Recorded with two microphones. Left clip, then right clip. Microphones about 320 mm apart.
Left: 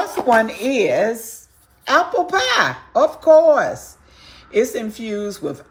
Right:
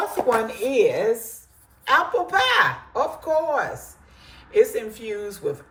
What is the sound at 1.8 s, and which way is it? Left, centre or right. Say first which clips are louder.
Speech: left 3 dB; centre.